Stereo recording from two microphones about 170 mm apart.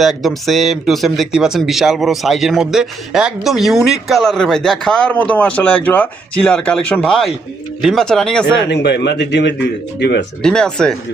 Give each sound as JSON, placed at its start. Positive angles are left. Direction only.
{"t": 0.0, "sound": "speech", "side_deg": 0}
{"t": 8.7, "sound": "speech", "side_deg": 90}
{"t": 10.4, "sound": "speech", "side_deg": 5}